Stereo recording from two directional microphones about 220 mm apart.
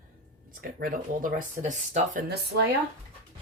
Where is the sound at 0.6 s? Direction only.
40° right (ahead or behind).